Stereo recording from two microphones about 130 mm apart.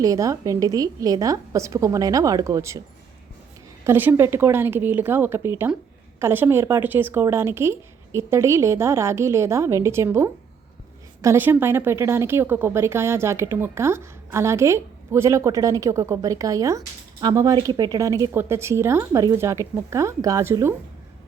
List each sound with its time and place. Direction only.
0.0 s a woman's voice: 25° right (ahead or behind)
3.8 s a woman's voice: 15° right (ahead or behind)